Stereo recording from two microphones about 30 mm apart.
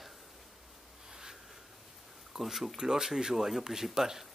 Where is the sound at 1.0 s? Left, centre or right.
Right.